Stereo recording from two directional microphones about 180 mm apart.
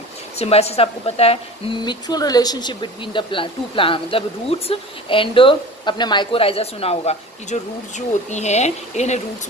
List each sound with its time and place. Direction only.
0.3 s a woman's voice: 35° left (ahead or behind)